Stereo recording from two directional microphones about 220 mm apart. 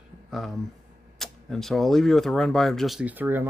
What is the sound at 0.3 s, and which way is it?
Speech, centre (ahead or behind).